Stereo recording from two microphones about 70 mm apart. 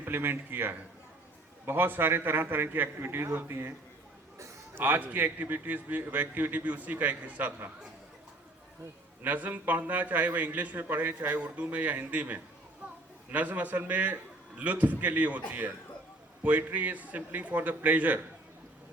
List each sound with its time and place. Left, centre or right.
0.0 s a man's voice: right
4.8 s a man's voice: right
9.2 s a man's voice: right
12.8 s children playing: centre
13.3 s a man's voice: right